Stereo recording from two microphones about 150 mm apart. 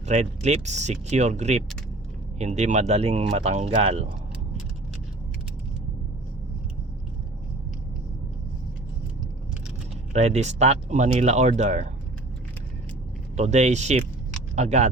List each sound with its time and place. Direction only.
0.0 s speech: 50° right (ahead or behind)
10.1 s speech: 45° right (ahead or behind)
13.3 s speech: 50° right (ahead or behind)